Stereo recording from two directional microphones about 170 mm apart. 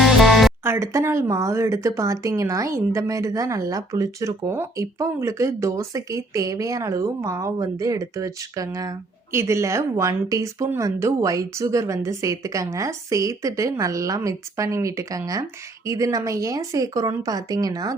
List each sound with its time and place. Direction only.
0.0 s music: centre (ahead or behind)
0.6 s speech: 15° right (ahead or behind)